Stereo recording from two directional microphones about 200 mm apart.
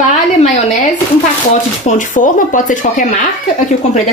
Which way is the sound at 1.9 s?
40° left (ahead or behind).